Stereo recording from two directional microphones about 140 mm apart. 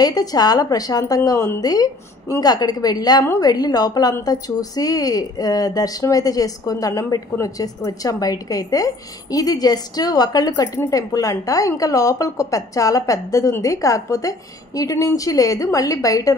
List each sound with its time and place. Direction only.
0.0 s a woman's voice: 25° left (ahead or behind)